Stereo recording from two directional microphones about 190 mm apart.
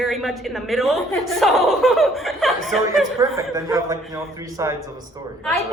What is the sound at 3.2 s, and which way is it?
A man's voice, 15° right (ahead or behind).